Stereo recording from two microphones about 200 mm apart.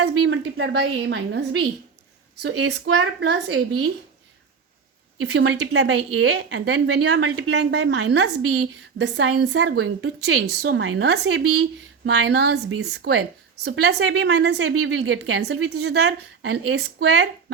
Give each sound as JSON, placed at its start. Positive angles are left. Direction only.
{"t": 0.0, "sound": "a woman's voice", "side_deg": -65}
{"t": 5.2, "sound": "a woman's voice", "side_deg": -65}
{"t": 10.4, "sound": "a woman's voice", "side_deg": -60}
{"t": 12.0, "sound": "a woman's voice", "side_deg": -65}
{"t": 15.8, "sound": "a woman's voice", "side_deg": -75}